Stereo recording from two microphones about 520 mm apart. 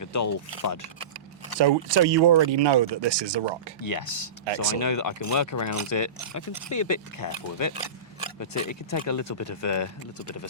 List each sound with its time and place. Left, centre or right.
0.0 s speech: left
1.5 s speech: right
3.8 s speech: left